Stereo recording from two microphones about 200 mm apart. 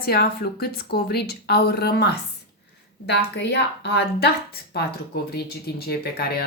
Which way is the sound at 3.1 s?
60° left (ahead or behind).